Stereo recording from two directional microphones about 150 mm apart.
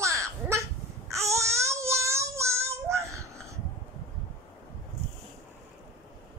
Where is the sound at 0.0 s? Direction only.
20° right (ahead or behind).